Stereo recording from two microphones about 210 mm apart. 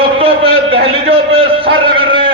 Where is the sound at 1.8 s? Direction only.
25° right (ahead or behind).